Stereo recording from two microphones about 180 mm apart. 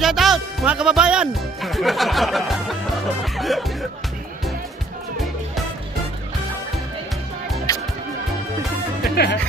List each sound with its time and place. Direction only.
0.0 s speech: centre (ahead or behind)
7.7 s music: 20° left (ahead or behind)
9.0 s music: 65° left (ahead or behind)